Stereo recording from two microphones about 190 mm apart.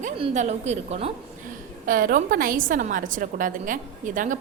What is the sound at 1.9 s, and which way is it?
A woman's voice, 45° right (ahead or behind).